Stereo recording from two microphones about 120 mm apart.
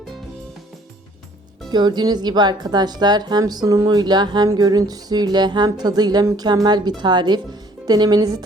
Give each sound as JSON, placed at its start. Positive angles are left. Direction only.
{"t": 1.7, "sound": "music", "side_deg": -35}